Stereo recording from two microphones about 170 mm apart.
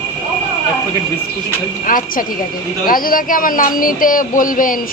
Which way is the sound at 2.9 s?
55° left (ahead or behind).